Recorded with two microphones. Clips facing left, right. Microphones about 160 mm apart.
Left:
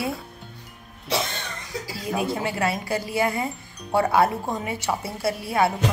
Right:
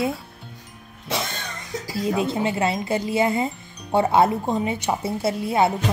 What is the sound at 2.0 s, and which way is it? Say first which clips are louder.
Speech: right 3 dB; 25° right (ahead or behind).